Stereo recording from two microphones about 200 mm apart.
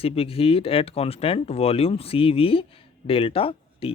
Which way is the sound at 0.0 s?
30° left (ahead or behind).